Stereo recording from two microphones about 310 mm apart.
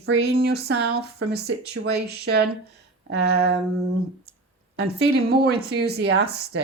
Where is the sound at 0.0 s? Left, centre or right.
Right.